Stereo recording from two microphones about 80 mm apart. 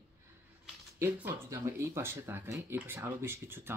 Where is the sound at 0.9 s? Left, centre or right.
Right.